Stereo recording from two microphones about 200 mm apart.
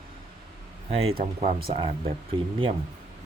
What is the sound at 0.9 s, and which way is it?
Speech, 30° right (ahead or behind).